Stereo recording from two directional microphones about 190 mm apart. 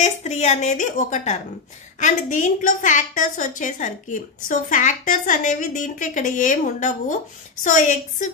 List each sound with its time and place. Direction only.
0.0 s a woman's voice: 35° left (ahead or behind)